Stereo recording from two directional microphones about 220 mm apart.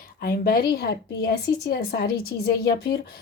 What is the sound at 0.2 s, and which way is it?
A woman's voice, 45° left (ahead or behind).